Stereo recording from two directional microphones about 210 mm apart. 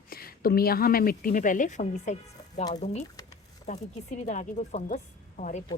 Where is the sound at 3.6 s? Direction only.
35° left (ahead or behind).